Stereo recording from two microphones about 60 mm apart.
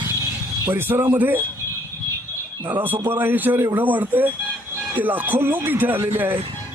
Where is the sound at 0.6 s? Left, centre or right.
Right.